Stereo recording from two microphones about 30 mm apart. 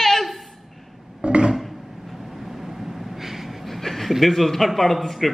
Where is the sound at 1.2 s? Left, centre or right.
Right.